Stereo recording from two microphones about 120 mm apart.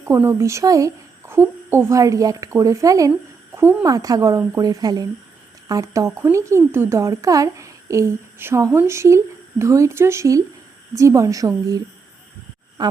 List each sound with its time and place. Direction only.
0.1 s a woman's voice: 20° right (ahead or behind)
12.8 s speech: 40° right (ahead or behind)